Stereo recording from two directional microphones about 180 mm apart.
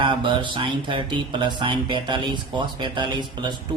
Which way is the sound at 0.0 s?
25° right (ahead or behind).